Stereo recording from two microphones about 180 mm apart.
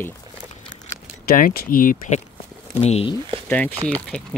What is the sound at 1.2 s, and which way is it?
Speech, 55° left (ahead or behind).